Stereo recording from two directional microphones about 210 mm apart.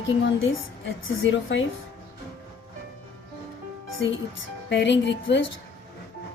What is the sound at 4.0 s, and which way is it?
Speech, 60° left (ahead or behind).